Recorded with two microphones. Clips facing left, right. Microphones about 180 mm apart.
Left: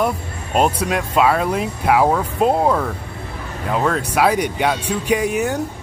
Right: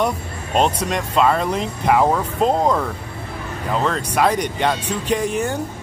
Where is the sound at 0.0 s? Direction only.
5° left (ahead or behind).